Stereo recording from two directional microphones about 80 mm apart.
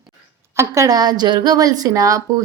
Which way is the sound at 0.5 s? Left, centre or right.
Right.